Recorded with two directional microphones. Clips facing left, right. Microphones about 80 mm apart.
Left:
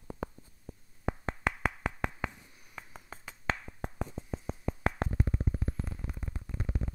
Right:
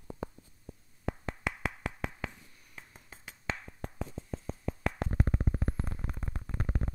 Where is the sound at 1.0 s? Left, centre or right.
Left.